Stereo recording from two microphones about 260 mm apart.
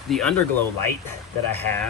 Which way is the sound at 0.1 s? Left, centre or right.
Centre.